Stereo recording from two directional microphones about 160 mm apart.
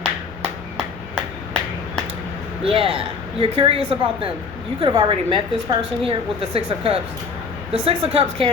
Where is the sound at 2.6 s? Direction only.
35° right (ahead or behind).